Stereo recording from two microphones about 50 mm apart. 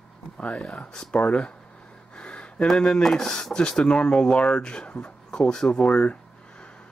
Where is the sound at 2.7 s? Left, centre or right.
Centre.